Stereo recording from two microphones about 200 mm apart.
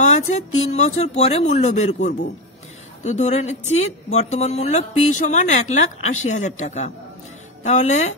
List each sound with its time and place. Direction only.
0.0 s speech: 35° left (ahead or behind)